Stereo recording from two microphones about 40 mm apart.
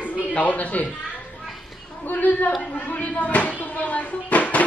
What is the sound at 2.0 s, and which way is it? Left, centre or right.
Speech, left.